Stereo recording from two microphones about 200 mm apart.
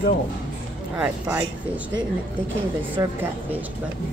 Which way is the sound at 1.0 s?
5° right (ahead or behind).